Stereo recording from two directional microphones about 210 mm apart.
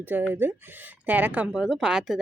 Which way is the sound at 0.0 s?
10° right (ahead or behind).